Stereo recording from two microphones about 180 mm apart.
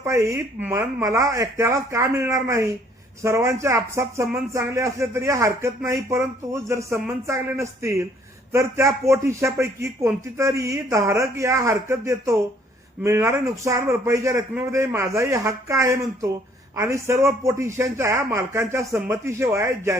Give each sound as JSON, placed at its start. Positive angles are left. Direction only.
{"t": 0.0, "sound": "a man's voice", "side_deg": -15}